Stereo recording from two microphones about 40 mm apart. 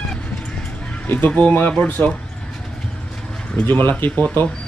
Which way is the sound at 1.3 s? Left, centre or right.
Left.